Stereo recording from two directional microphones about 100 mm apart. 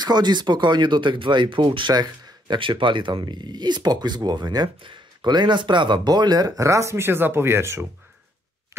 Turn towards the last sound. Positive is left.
turn(degrees=-25)  # may be behind; listen again after turning